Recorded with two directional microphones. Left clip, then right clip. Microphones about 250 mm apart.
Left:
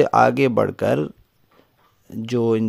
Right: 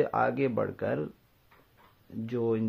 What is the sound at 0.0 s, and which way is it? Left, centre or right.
Speech, left.